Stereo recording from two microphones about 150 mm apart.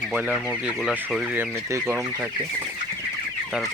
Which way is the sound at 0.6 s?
5° right (ahead or behind).